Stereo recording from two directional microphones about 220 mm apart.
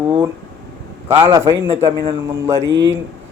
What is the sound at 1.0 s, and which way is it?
Speech, 10° right (ahead or behind).